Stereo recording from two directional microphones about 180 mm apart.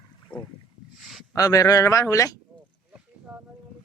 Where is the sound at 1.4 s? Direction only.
20° left (ahead or behind).